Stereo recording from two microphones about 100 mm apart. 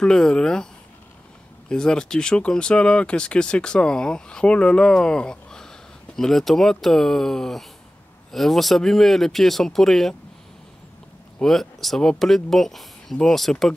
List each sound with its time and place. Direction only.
0.0 s speech: 10° left (ahead or behind)
1.7 s speech: 10° left (ahead or behind)
11.3 s speech: 5° left (ahead or behind)